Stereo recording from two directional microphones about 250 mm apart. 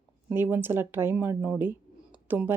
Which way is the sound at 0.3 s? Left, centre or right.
Centre.